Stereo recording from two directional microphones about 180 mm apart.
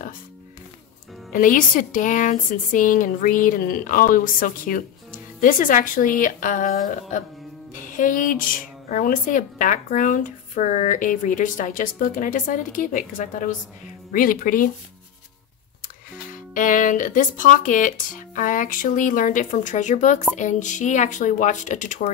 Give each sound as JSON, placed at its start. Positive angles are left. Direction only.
{"t": 1.3, "sound": "speech", "side_deg": 50}
{"t": 16.5, "sound": "speech", "side_deg": 45}